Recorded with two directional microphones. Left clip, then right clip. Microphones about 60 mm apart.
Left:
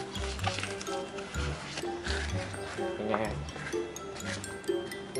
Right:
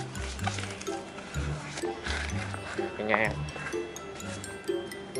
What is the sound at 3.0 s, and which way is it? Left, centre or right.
Speech, right.